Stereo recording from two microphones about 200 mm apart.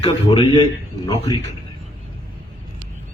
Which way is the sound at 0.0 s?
25° left (ahead or behind).